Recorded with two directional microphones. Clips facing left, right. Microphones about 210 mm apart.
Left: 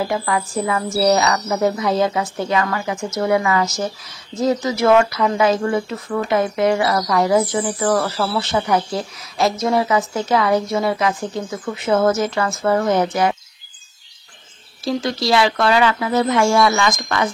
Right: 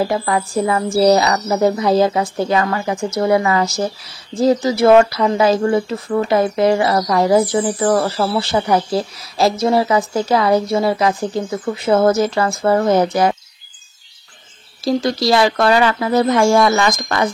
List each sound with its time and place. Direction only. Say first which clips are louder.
0.1 s a woman's voice: right 3 dB; 35° right (ahead or behind)
14.9 s a woman's voice: right 3 dB; 40° right (ahead or behind)